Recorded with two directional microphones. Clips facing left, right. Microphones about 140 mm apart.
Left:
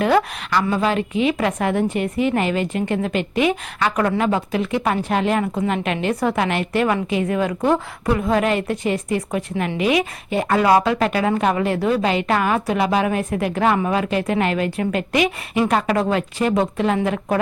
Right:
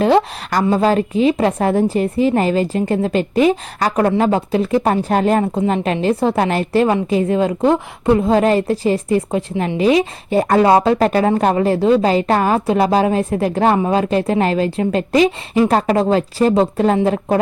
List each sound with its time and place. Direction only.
0.0 s speech: 25° right (ahead or behind)
0.5 s a woman's voice: 40° right (ahead or behind)